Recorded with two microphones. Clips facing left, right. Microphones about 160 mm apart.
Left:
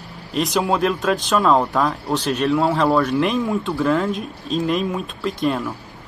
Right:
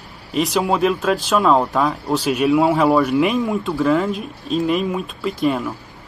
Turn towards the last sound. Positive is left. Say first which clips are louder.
# right 2 dB
turn(degrees=-5)  # may be behind; listen again after turning